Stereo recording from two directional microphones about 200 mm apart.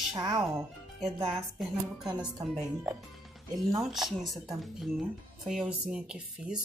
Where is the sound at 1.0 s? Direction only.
Centre (ahead or behind).